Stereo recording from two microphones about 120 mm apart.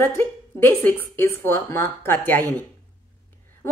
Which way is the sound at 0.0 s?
15° left (ahead or behind).